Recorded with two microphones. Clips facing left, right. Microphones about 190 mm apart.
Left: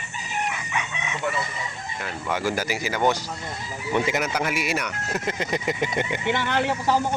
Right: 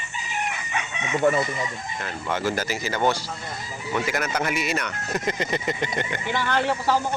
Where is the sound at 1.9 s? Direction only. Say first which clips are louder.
Left 1 dB; 5° left (ahead or behind).